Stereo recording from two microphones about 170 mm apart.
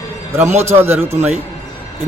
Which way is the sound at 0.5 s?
40° right (ahead or behind).